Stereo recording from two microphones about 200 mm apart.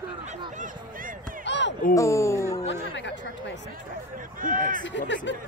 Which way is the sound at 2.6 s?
65° left (ahead or behind).